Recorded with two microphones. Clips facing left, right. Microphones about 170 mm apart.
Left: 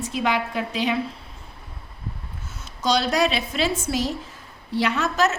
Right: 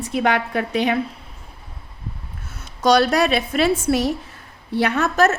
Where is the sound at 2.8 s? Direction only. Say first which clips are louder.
Right 5 dB; 60° right (ahead or behind).